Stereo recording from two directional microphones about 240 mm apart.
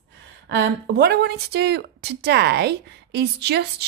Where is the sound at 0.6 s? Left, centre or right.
Right.